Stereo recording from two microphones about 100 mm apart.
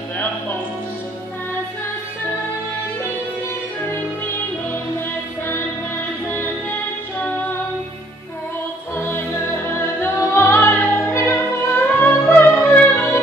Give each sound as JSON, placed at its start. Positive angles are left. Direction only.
{"t": 6.2, "sound": "music", "side_deg": 25}
{"t": 8.9, "sound": "music", "side_deg": 20}